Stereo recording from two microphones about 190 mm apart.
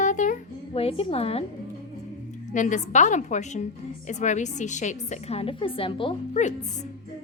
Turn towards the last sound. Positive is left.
turn(degrees=35)  # may be behind; listen again after turning